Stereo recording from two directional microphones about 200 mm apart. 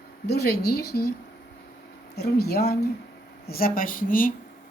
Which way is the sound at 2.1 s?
55° left (ahead or behind).